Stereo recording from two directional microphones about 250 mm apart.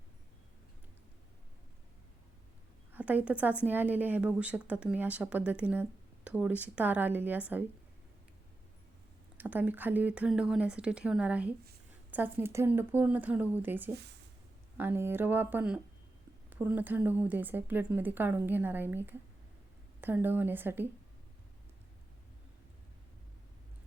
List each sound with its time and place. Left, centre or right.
2.9 s a woman's voice: centre
9.4 s a woman's voice: centre
13.9 s speech: right
14.8 s a woman's voice: centre